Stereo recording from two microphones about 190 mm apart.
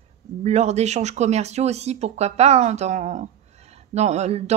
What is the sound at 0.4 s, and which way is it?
Speech, 35° right (ahead or behind).